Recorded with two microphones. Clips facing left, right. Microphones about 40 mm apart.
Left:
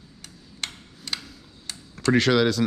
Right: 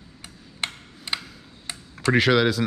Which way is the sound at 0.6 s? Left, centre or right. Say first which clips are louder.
Right 4 dB; right.